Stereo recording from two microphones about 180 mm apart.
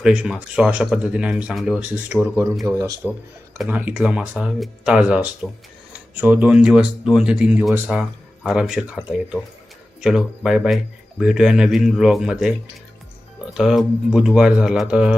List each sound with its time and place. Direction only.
0.0 s speech: 5° right (ahead or behind)
2.6 s speech: 20° right (ahead or behind)
3.6 s speech: 10° right (ahead or behind)
10.0 s speech: 5° right (ahead or behind)